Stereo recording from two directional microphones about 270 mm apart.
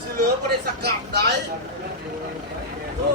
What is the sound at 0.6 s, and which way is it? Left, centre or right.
Speech, right.